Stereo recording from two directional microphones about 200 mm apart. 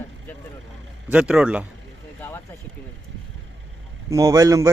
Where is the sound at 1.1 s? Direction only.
5° right (ahead or behind).